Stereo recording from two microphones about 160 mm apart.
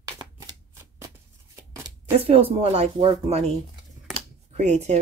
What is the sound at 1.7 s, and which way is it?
Shuffling cards, 20° right (ahead or behind).